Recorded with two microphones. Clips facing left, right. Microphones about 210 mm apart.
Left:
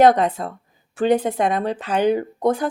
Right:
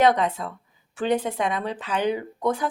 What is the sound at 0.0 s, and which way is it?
A woman's voice, 45° left (ahead or behind).